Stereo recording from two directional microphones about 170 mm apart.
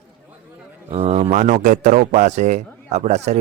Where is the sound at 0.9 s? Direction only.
40° right (ahead or behind).